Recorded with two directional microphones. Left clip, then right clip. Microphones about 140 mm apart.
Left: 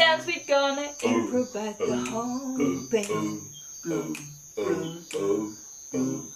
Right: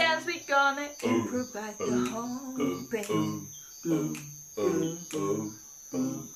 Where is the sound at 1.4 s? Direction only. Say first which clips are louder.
Left 6 dB; 20° left (ahead or behind).